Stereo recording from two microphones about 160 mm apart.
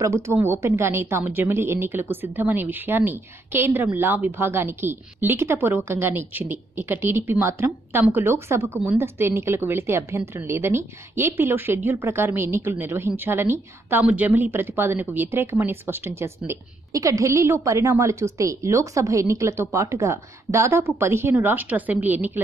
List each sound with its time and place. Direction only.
0.0 s speech: 15° right (ahead or behind)